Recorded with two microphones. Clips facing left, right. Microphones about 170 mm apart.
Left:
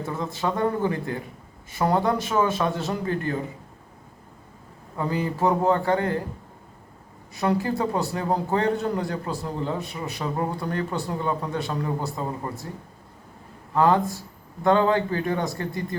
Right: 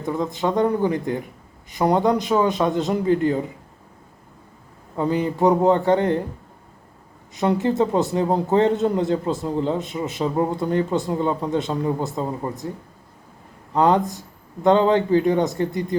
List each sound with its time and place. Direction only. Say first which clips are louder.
0.0 s a man's voice: right 5 dB; 20° right (ahead or behind)
4.9 s a man's voice: right 5 dB; 20° right (ahead or behind)
7.3 s a man's voice: right 5 dB; 20° right (ahead or behind)
13.7 s a man's voice: right 2 dB; 20° right (ahead or behind)